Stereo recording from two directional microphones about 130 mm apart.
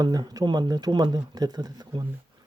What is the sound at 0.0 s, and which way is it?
Speech, 30° right (ahead or behind).